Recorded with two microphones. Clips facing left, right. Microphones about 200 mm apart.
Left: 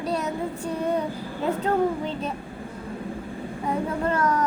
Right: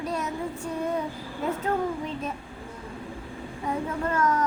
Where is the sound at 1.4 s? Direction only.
30° left (ahead or behind).